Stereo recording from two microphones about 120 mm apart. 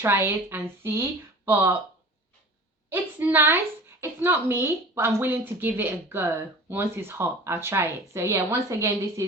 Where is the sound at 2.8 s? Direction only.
15° right (ahead or behind).